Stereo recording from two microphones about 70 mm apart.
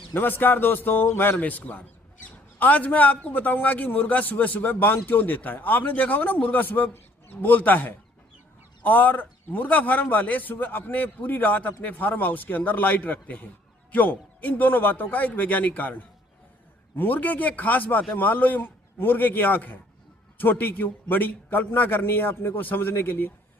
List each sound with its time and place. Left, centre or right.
0.1 s a man's voice: left